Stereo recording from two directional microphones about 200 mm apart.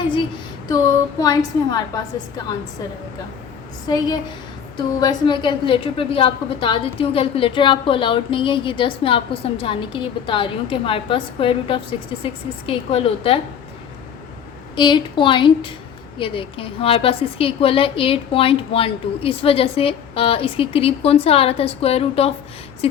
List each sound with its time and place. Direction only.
0.7 s a woman's voice: 20° left (ahead or behind)
3.8 s a woman's voice: 20° left (ahead or behind)
14.8 s a woman's voice: 25° left (ahead or behind)